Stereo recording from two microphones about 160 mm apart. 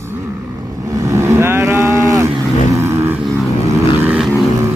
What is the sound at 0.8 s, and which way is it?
Cattle, 20° right (ahead or behind).